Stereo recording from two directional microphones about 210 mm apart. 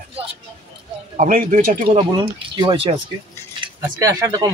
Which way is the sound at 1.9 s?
25° right (ahead or behind).